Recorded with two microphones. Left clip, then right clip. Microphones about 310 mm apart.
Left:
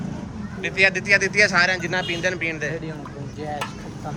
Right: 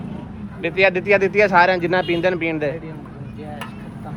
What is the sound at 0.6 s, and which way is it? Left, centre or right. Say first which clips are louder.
Speech: right 2 dB; centre.